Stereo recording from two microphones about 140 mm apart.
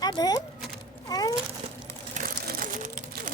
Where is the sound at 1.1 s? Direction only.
25° left (ahead or behind).